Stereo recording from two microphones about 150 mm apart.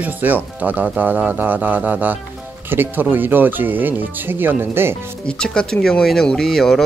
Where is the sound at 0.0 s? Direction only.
10° right (ahead or behind).